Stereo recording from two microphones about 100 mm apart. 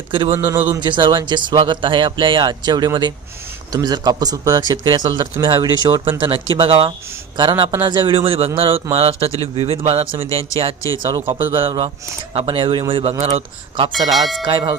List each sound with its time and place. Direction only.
0.3 s speech: 25° right (ahead or behind)
0.8 s speech: 50° right (ahead or behind)
6.1 s a man's voice: 60° right (ahead or behind); by 10.2 s 75° right (ahead or behind)
11.0 s speech: 50° right (ahead or behind)
12.9 s speech: 75° right (ahead or behind)
13.9 s speech: centre (ahead or behind)
14.4 s speech: 55° right (ahead or behind)